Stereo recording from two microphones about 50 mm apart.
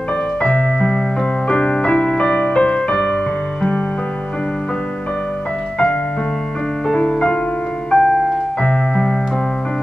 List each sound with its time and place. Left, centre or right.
0.4 s music: centre
6.9 s music: centre
7.9 s piano: centre
8.6 s keyboard: centre